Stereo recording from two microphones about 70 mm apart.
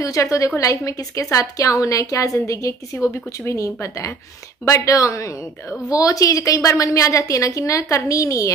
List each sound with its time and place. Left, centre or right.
0.0 s a woman's voice: left